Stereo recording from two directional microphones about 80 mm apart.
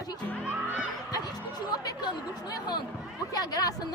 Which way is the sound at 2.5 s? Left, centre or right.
Left.